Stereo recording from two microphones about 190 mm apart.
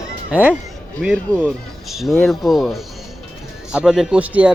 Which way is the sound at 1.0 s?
5° left (ahead or behind).